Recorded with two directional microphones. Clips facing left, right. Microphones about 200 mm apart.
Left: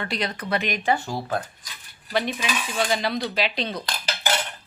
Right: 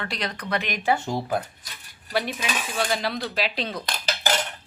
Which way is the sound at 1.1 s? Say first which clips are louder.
Right 2 dB; 15° right (ahead or behind).